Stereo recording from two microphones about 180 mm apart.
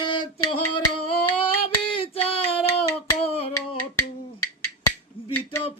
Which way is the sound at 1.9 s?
30° left (ahead or behind).